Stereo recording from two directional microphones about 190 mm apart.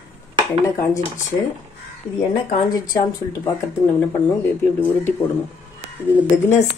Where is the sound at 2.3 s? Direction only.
25° left (ahead or behind).